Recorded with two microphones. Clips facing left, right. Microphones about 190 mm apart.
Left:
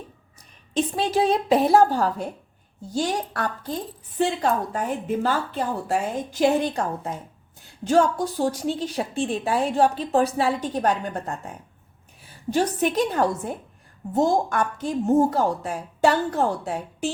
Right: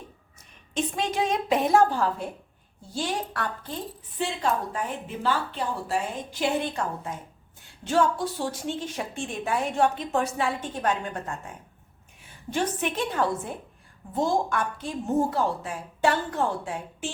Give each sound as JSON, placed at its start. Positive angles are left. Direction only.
{"t": 0.7, "sound": "a woman's voice", "side_deg": 35}